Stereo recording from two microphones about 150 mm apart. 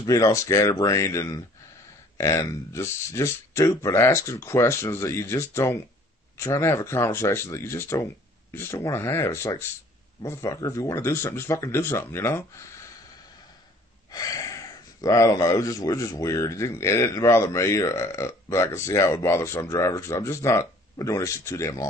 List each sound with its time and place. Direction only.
0.0 s speech: 25° left (ahead or behind)
14.1 s a sound: 25° left (ahead or behind)
15.0 s speech: 20° left (ahead or behind)